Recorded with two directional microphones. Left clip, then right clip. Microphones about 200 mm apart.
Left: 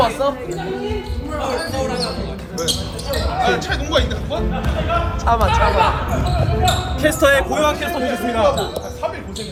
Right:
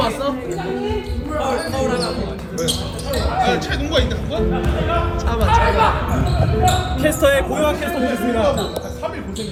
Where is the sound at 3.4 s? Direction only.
10° left (ahead or behind).